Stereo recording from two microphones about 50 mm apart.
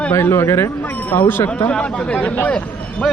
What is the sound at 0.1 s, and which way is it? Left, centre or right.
Speech, left.